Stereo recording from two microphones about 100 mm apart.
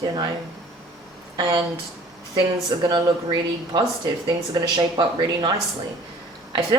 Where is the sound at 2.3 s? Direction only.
50° right (ahead or behind).